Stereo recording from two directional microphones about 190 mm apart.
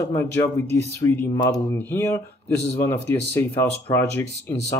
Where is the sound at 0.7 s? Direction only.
10° left (ahead or behind).